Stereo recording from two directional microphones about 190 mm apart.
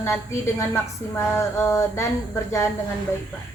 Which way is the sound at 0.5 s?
15° left (ahead or behind).